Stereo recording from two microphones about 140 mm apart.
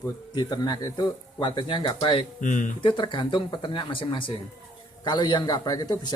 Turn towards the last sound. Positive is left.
turn(degrees=30)  # may be behind; listen again after turning